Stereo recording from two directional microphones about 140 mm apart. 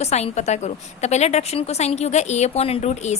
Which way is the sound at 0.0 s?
50° left (ahead or behind).